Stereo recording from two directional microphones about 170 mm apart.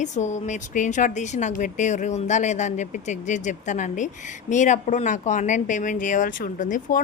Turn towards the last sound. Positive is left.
turn(degrees=50)  # may be behind; listen again after turning